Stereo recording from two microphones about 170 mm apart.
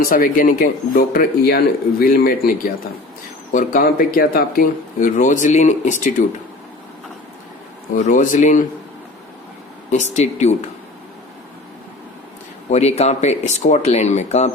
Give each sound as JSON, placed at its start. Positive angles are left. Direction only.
{"t": 0.0, "sound": "speech", "side_deg": 55}
{"t": 3.5, "sound": "speech", "side_deg": 50}
{"t": 7.9, "sound": "speech", "side_deg": 50}
{"t": 9.9, "sound": "speech", "side_deg": 40}
{"t": 12.7, "sound": "speech", "side_deg": 40}